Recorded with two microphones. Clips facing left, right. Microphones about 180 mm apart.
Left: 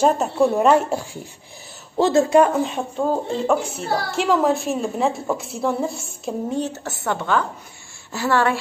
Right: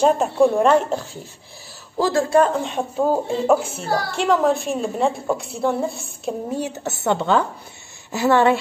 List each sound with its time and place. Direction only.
0.0 s speech: 5° left (ahead or behind)
2.0 s speech: 25° left (ahead or behind)
2.6 s a woman's voice: centre (ahead or behind)
6.7 s a woman's voice: 20° right (ahead or behind)